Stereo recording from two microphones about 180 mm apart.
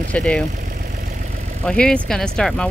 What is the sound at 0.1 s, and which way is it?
Speech, 5° left (ahead or behind).